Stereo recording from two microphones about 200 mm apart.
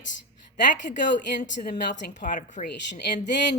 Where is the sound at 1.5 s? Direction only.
60° left (ahead or behind).